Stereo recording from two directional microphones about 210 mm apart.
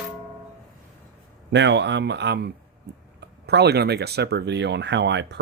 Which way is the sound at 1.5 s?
55° right (ahead or behind).